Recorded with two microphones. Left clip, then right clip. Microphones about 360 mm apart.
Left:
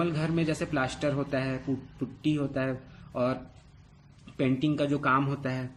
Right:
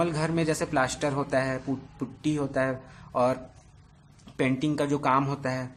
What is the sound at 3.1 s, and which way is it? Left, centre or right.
A man's voice, centre.